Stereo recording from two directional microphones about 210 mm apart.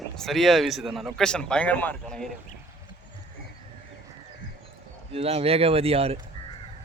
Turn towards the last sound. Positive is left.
turn(degrees=-30)  # may be behind; listen again after turning